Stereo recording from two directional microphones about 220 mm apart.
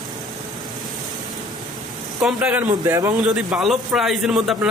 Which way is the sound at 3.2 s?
5° right (ahead or behind).